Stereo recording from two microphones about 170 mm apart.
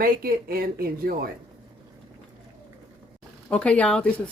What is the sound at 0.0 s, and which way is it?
Speech, 60° right (ahead or behind).